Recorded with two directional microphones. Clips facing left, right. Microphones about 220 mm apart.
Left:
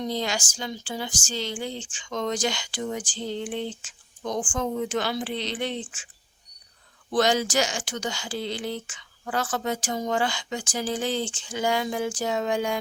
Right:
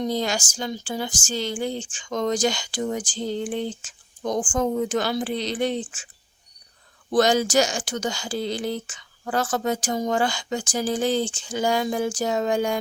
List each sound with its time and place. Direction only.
0.0 s a woman's voice: 45° right (ahead or behind)
7.1 s a woman's voice: 45° right (ahead or behind)